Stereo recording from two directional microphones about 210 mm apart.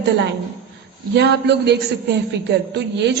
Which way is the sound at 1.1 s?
55° right (ahead or behind).